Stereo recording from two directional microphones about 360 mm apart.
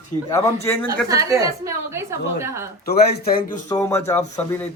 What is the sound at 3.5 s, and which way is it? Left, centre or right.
Speech, centre.